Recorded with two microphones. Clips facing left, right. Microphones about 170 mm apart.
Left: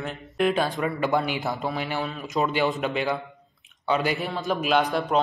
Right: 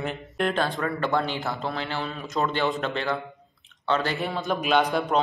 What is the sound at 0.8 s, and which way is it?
A man's voice, 15° left (ahead or behind).